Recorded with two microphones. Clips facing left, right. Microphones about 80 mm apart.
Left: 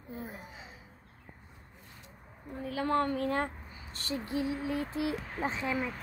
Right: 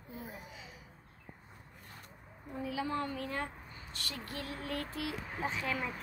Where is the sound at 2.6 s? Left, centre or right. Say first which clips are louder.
Left 6 dB; left.